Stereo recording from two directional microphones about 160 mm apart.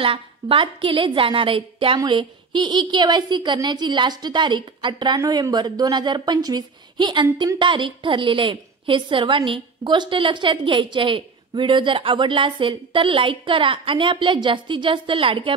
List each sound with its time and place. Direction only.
0.0 s a woman's voice: 35° right (ahead or behind)